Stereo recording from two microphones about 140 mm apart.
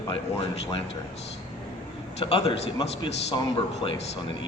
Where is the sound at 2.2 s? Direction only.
45° left (ahead or behind).